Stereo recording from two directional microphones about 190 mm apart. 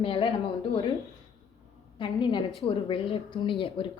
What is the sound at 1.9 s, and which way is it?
A woman's voice, 25° left (ahead or behind).